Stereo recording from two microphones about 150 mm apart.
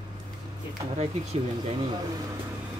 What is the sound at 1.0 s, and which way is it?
Speech, 45° right (ahead or behind).